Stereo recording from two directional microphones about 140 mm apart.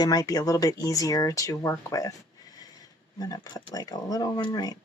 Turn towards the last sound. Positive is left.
turn(degrees=30)  # may be behind; listen again after turning